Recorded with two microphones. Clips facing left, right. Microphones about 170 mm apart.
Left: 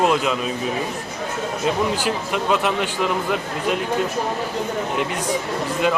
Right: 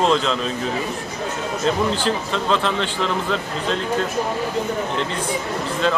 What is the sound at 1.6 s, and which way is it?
Speech, 10° left (ahead or behind).